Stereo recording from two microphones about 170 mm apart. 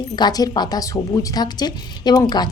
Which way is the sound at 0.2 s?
20° left (ahead or behind).